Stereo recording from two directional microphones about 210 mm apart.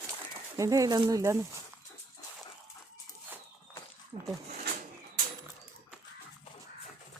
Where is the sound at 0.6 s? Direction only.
15° right (ahead or behind).